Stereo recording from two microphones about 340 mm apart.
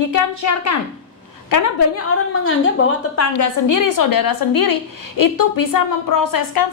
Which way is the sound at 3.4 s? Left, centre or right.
Left.